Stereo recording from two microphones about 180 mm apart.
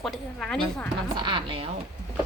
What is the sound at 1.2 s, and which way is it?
Speech, 25° right (ahead or behind).